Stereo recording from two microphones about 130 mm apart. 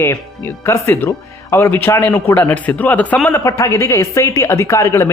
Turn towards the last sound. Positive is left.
turn(degrees=20)  # may be behind; listen again after turning